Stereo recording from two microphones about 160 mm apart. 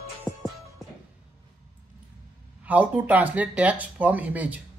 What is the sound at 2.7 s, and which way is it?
Speech, 10° right (ahead or behind).